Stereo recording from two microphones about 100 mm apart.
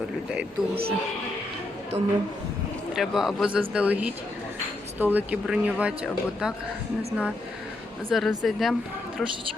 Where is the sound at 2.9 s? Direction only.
5° right (ahead or behind).